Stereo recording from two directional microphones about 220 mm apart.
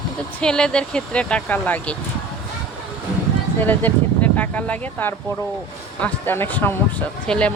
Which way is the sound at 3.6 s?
10° left (ahead or behind).